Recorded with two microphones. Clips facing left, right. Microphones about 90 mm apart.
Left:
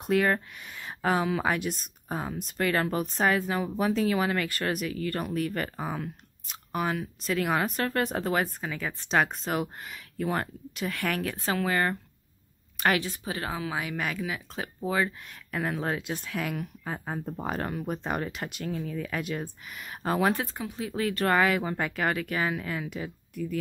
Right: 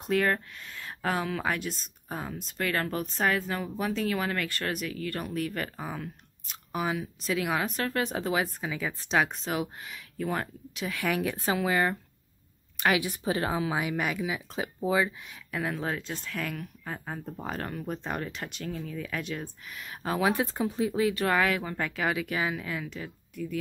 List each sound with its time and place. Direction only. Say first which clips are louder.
0.0 s speech: left 2 dB; centre (ahead or behind)
11.1 s speech: right 3 dB; 10° right (ahead or behind)
12.9 s speech: right 1 dB; 15° right (ahead or behind)
13.2 s speech: right 4 dB; 25° right (ahead or behind)
15.0 s speech: left 1 dB; 5° left (ahead or behind)
17.0 s speech: left 3 dB; 15° left (ahead or behind)
17.3 s speech: left 3 dB; 5° left (ahead or behind)
20.4 s speech: right 6 dB; 25° right (ahead or behind)
21.1 s speech: left 2 dB; centre (ahead or behind)